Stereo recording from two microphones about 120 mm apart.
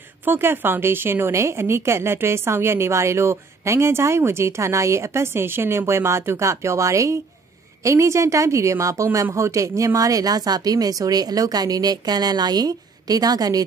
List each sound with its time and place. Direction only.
0.2 s a woman's voice: 20° right (ahead or behind)